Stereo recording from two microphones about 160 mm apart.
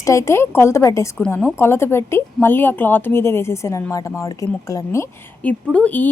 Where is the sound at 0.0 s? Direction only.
20° left (ahead or behind).